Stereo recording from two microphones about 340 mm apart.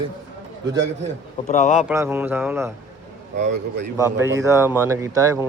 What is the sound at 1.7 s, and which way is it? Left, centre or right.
Speech, centre.